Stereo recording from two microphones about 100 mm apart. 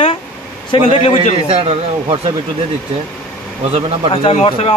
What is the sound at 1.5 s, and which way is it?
Speech, 70° right (ahead or behind).